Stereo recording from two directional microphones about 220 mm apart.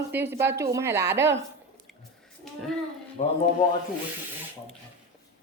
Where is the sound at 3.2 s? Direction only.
30° left (ahead or behind).